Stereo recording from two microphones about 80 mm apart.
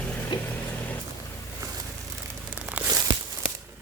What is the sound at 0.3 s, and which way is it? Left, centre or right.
Vehicle, left.